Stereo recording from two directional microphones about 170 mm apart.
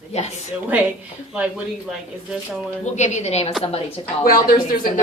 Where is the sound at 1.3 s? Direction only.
5° right (ahead or behind).